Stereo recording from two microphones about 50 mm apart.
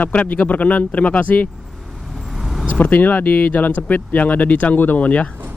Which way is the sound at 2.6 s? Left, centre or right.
Left.